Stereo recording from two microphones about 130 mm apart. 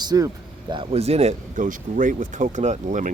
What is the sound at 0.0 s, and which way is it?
Speech, 30° right (ahead or behind).